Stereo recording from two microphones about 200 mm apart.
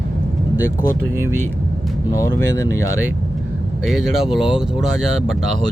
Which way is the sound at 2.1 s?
15° left (ahead or behind).